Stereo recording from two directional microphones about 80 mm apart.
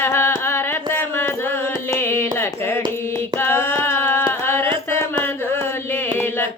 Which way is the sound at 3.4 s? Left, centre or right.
Left.